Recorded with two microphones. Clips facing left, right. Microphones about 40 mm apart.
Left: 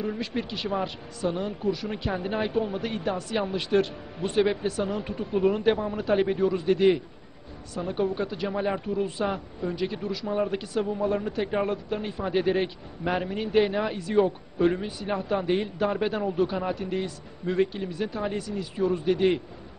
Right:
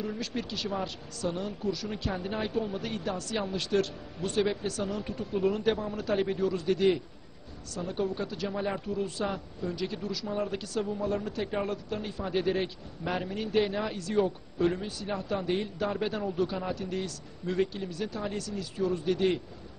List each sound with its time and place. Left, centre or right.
0.0 s a man's voice: left